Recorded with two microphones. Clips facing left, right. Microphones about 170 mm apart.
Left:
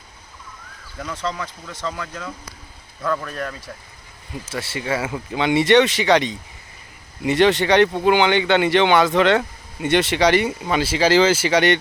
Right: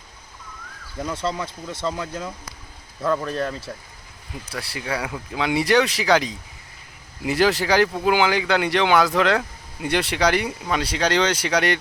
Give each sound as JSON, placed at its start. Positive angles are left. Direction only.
{"t": 0.9, "sound": "speech", "side_deg": -25}
{"t": 4.5, "sound": "speech", "side_deg": 0}